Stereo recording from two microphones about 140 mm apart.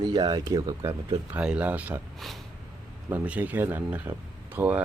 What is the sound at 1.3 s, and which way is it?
Speech, 10° right (ahead or behind).